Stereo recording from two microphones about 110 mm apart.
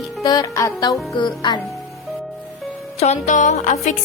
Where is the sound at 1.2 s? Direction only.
40° left (ahead or behind).